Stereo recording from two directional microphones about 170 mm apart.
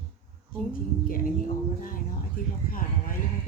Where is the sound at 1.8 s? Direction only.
55° left (ahead or behind).